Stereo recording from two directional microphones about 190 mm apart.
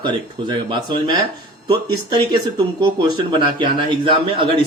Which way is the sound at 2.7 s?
25° right (ahead or behind).